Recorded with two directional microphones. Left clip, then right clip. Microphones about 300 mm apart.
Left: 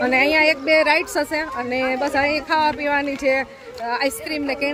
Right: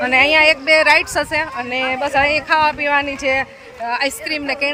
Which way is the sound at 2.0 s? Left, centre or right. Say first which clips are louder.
Right 4 dB; centre.